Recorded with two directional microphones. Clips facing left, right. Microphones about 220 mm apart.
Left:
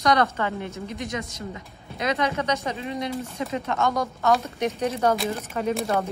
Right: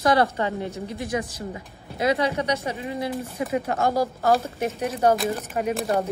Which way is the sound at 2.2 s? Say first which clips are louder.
Right 1 dB; 15° right (ahead or behind).